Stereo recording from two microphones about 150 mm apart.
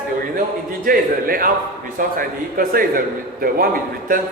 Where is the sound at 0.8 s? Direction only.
75° right (ahead or behind).